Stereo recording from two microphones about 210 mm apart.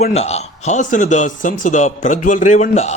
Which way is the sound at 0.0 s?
30° left (ahead or behind).